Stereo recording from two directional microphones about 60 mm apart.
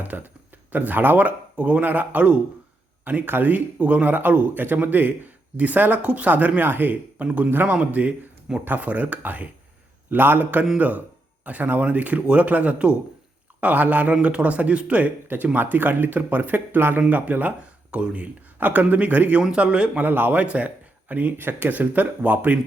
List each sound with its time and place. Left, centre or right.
0.0 s a man's voice: right
7.3 s a man's voice: centre
20.0 s speech: right